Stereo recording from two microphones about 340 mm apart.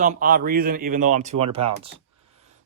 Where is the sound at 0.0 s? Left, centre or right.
Right.